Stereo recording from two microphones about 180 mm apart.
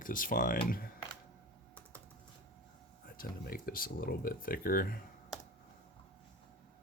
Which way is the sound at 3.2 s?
55° left (ahead or behind).